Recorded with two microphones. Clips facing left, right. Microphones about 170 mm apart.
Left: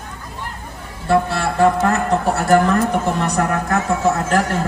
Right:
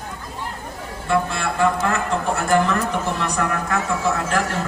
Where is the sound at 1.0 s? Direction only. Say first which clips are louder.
Left 4 dB; 35° left (ahead or behind).